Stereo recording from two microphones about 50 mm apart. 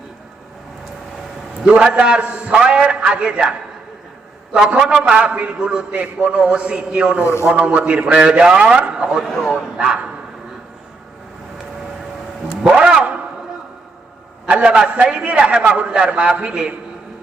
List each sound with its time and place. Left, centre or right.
1.6 s a man's voice: centre
9.2 s speech: centre
9.5 s a man's voice: centre
12.6 s a sound: centre
14.4 s a sound: right
14.8 s a man's voice: right